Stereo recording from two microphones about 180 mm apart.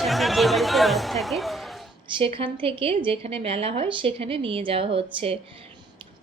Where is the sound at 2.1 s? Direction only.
30° right (ahead or behind).